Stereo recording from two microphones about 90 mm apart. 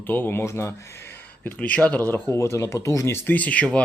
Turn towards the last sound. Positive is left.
turn(degrees=15)  # may be behind; listen again after turning